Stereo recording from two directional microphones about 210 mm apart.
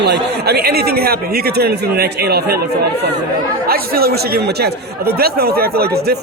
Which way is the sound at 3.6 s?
45° right (ahead or behind).